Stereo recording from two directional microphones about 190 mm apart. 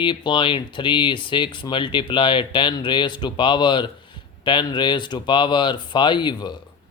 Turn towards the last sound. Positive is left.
turn(degrees=25)  # may be behind; listen again after turning